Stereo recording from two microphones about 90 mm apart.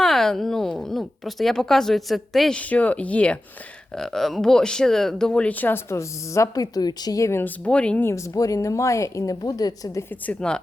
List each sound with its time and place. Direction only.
0.0 s a woman's voice: 5° left (ahead or behind)
2.6 s speech: 15° left (ahead or behind)
3.9 s speech: 5° left (ahead or behind); by 7.5 s 30° left (ahead or behind)
7.6 s speech: 15° left (ahead or behind)
8.0 s a woman's voice: 35° left (ahead or behind)
10.2 s speech: 10° left (ahead or behind)